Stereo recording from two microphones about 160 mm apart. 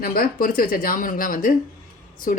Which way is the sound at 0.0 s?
65° left (ahead or behind).